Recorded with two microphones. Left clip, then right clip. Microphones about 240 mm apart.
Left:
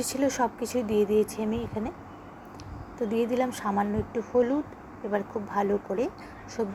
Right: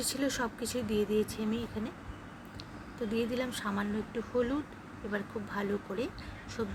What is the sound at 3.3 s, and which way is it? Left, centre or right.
Speech, centre.